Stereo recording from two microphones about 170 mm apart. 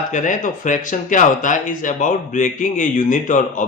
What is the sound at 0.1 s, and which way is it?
Speech, 50° left (ahead or behind).